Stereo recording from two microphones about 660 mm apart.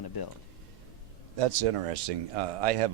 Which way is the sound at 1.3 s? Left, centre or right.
Right.